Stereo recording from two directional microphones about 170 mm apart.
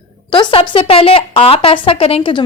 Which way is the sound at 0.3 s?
30° left (ahead or behind).